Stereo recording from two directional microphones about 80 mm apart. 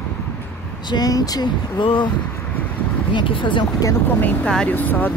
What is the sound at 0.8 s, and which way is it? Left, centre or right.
Speech, left.